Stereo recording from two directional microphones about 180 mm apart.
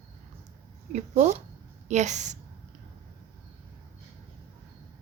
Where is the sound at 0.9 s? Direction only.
40° right (ahead or behind).